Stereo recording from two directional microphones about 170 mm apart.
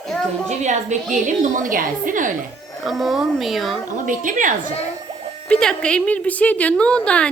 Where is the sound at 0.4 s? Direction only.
45° right (ahead or behind).